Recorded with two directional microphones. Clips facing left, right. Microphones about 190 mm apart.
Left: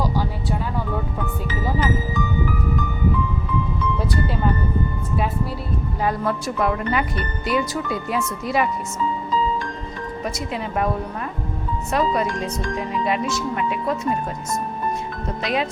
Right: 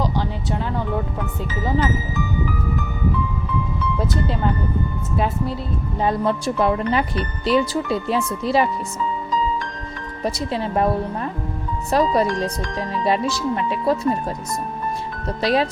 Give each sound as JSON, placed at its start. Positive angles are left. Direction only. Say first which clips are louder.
{"t": 4.0, "sound": "speech", "louder": "right 1 dB", "side_deg": -20}
{"t": 10.2, "sound": "speech", "louder": "right 6 dB", "side_deg": -30}
{"t": 11.9, "sound": "speech", "louder": "right 3 dB", "side_deg": -35}
{"t": 15.4, "sound": "speech", "louder": "right 5 dB", "side_deg": -35}